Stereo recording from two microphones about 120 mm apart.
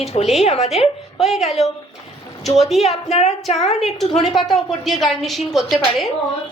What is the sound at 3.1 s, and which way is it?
Speech, 60° left (ahead or behind).